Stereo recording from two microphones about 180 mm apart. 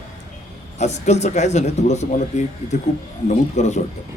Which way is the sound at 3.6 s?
40° left (ahead or behind).